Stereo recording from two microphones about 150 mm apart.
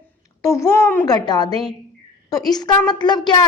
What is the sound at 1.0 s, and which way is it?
A woman's voice, 25° left (ahead or behind).